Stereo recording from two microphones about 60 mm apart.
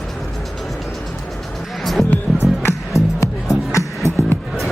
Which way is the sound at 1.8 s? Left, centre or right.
Centre.